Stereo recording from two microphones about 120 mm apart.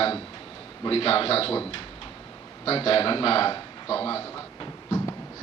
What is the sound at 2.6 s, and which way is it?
Speech, 55° left (ahead or behind).